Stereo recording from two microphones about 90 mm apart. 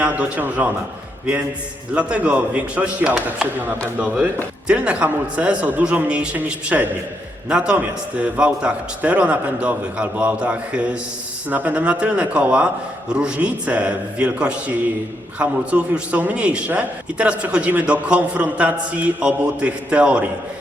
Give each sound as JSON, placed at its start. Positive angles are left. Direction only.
{"t": 0.0, "sound": "a man's voice", "side_deg": -20}
{"t": 2.0, "sound": "a man's voice", "side_deg": -15}